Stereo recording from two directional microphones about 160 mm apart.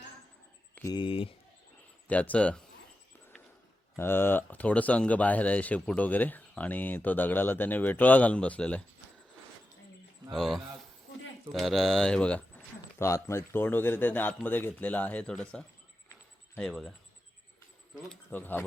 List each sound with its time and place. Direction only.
0.9 s speech: 35° left (ahead or behind)
2.0 s speech: 10° left (ahead or behind)
3.9 s speech: 15° left (ahead or behind)
10.3 s speech: centre (ahead or behind)
17.9 s speech: 5° left (ahead or behind)